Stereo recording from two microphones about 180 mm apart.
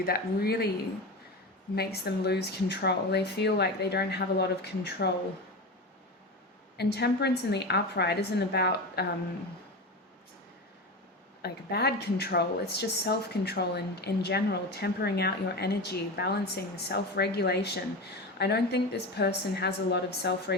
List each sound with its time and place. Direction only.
0.0 s speech: 60° left (ahead or behind)
1.7 s speech: 60° left (ahead or behind)
6.7 s speech: 65° left (ahead or behind)
11.4 s speech: 65° left (ahead or behind)